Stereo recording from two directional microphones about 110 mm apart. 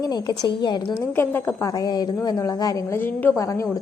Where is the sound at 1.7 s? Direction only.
35° left (ahead or behind).